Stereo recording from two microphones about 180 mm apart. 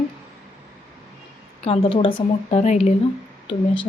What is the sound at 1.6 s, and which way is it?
Speech, 35° left (ahead or behind).